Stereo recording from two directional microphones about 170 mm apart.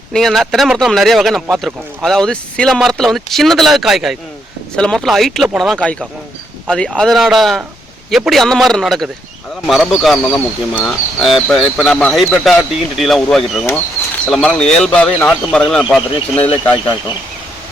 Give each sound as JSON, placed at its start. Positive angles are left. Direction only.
{"t": 0.1, "sound": "speech", "side_deg": 0}
{"t": 15.8, "sound": "speech", "side_deg": -5}
{"t": 16.3, "sound": "speech", "side_deg": 10}